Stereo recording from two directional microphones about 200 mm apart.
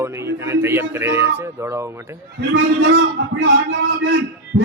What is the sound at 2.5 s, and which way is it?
Speech, 75° right (ahead or behind).